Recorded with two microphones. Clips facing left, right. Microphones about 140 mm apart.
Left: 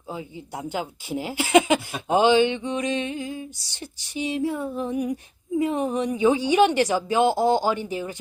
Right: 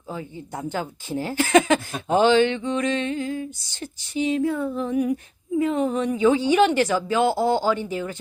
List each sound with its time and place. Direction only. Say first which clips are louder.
0.1 s speech: right 1 dB; 15° left (ahead or behind)